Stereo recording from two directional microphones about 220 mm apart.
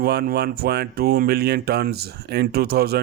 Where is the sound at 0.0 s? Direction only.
45° right (ahead or behind).